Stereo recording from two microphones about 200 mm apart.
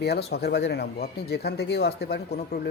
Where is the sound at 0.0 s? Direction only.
55° left (ahead or behind).